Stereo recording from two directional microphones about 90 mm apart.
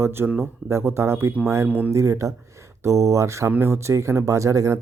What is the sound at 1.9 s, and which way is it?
Speech, 35° right (ahead or behind).